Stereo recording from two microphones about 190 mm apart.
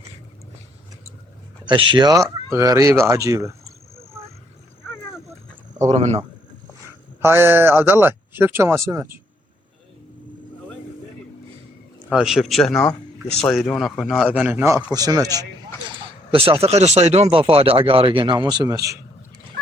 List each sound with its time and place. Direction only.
1.6 s speech: 25° right (ahead or behind)
5.9 s speech: 35° right (ahead or behind)
7.2 s speech: 10° right (ahead or behind)
12.0 s a man's voice: 5° right (ahead or behind)
16.3 s speech: 30° right (ahead or behind)